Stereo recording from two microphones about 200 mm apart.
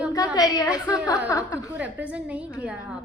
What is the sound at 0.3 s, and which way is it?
A woman's voice, 15° left (ahead or behind).